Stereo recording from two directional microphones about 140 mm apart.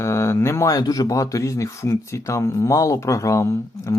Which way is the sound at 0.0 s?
20° left (ahead or behind).